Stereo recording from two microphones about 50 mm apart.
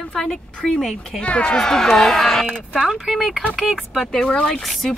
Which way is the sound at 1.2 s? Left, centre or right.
Left.